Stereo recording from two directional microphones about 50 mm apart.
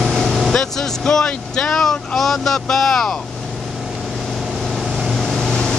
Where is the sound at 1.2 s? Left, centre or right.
Centre.